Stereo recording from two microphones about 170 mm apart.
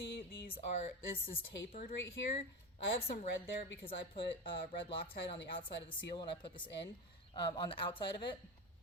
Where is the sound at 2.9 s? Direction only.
35° left (ahead or behind).